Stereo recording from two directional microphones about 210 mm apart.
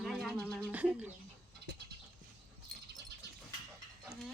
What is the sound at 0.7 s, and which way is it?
Speech, 5° right (ahead or behind).